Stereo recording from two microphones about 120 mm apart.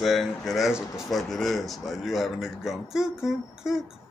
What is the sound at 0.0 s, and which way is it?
Speech, centre (ahead or behind).